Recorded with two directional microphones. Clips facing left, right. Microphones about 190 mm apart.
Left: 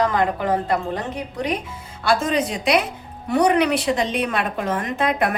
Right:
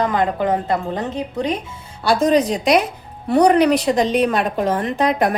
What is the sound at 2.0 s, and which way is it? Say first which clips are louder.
A woman's voice: right 5 dB; 35° right (ahead or behind).